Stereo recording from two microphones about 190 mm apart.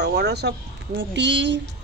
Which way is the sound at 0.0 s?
60° right (ahead or behind).